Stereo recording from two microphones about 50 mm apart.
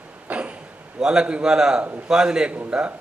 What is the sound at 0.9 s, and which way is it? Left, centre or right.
A man's voice, centre.